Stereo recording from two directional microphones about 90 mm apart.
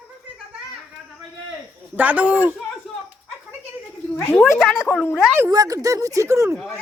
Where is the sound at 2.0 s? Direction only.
15° right (ahead or behind).